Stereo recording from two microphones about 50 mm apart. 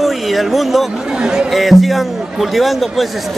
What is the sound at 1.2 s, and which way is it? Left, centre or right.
Speech, centre.